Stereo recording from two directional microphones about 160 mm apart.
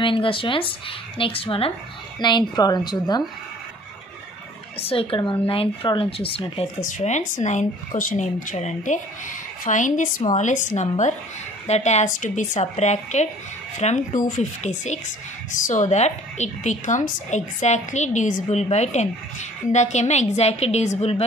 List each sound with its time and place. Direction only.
0.0 s a woman's voice: 35° left (ahead or behind)
4.7 s speech: 35° left (ahead or behind)
6.8 s a woman's voice: 50° left (ahead or behind)